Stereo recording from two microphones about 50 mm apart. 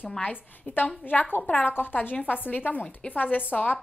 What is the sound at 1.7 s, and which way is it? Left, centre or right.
A woman's voice, left.